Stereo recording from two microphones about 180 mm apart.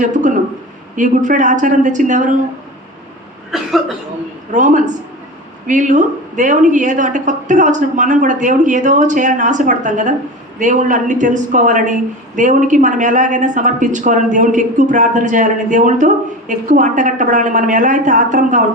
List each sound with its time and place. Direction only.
0.0 s a woman's voice: 45° right (ahead or behind)
3.5 s speech: centre (ahead or behind)
4.5 s a woman's voice: 45° right (ahead or behind)